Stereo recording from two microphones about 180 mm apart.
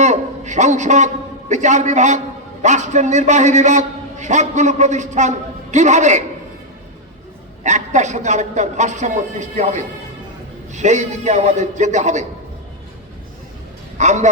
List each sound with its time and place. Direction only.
0.0 s a man's voice: 40° right (ahead or behind)
7.6 s a man's voice: 40° right (ahead or behind)
14.0 s a man's voice: 40° right (ahead or behind)